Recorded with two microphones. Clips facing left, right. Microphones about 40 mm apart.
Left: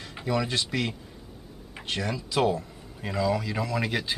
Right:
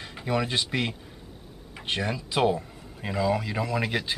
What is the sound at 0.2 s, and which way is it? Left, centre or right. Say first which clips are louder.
Speech: right 1 dB; centre.